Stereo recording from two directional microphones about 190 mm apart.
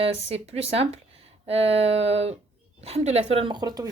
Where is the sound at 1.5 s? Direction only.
30° right (ahead or behind).